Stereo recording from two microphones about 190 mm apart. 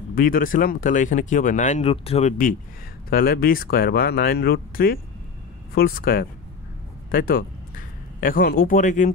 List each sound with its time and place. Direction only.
0.1 s speech: 50° left (ahead or behind); by 2.3 s 30° left (ahead or behind)
3.1 s speech: 50° left (ahead or behind)